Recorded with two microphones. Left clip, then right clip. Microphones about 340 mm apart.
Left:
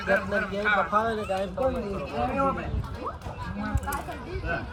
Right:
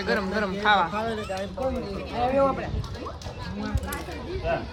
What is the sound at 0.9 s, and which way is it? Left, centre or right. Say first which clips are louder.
Speech: left 3 dB; centre.